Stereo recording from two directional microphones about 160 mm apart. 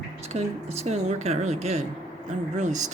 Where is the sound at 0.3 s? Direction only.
45° right (ahead or behind).